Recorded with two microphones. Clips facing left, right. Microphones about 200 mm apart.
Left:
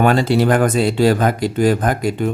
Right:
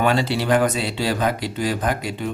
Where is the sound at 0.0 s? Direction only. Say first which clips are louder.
Left 6 dB; 50° left (ahead or behind).